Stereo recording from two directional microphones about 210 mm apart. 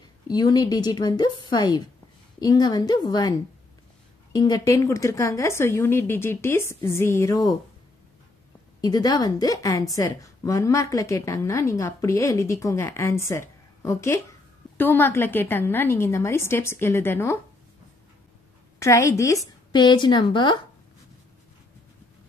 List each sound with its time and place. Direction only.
0.3 s a woman's voice: 20° left (ahead or behind)
8.8 s a woman's voice: 20° left (ahead or behind)
18.8 s a woman's voice: 15° left (ahead or behind)